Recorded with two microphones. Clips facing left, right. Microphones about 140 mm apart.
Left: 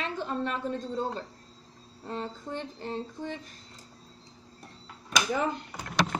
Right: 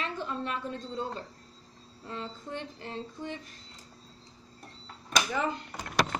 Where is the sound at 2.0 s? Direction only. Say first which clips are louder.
Left 3 dB; 40° left (ahead or behind).